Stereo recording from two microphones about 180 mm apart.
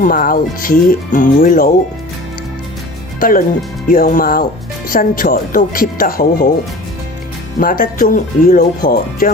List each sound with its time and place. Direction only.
0.0 s speech: 50° left (ahead or behind)
3.2 s speech: 50° left (ahead or behind)
7.6 s speech: 50° left (ahead or behind)